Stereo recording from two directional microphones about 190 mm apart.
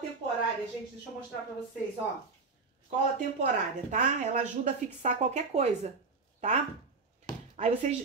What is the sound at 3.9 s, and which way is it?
Speech, 40° right (ahead or behind).